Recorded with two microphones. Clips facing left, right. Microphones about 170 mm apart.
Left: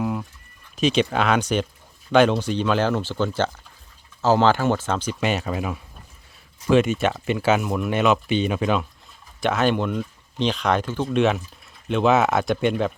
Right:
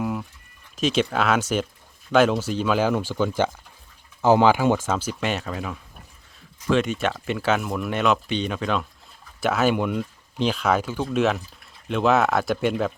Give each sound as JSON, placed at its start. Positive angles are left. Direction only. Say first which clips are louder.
{"t": 0.0, "sound": "sheep", "louder": "left 1 dB", "side_deg": 0}
{"t": 0.8, "sound": "speech", "louder": "left 2 dB", "side_deg": 0}
{"t": 9.4, "sound": "speech", "louder": "even", "side_deg": -5}